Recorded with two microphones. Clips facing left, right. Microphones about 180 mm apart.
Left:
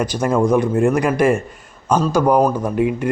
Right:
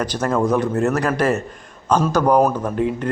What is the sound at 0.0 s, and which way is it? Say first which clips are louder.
A man's voice: left 2 dB; 10° left (ahead or behind).